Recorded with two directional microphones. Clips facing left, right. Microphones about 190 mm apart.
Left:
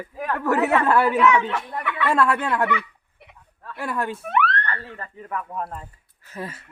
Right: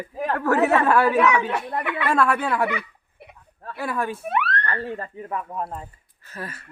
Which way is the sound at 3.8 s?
10° right (ahead or behind).